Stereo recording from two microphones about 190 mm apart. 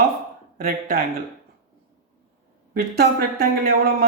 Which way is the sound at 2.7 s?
50° right (ahead or behind).